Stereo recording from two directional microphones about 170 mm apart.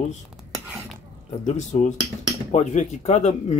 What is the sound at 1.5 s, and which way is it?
Speech, 40° left (ahead or behind).